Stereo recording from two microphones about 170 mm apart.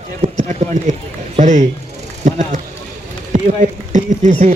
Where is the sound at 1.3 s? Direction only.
40° right (ahead or behind).